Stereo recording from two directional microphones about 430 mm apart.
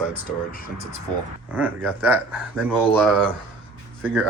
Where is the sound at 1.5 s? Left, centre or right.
Centre.